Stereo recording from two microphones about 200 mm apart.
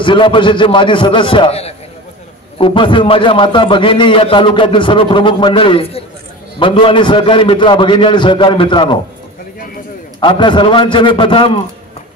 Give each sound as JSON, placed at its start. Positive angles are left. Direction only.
{"t": 0.0, "sound": "a man's voice", "side_deg": 25}
{"t": 10.2, "sound": "a man's voice", "side_deg": 25}